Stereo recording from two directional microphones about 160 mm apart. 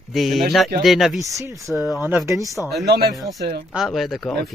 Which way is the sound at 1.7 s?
Centre (ahead or behind).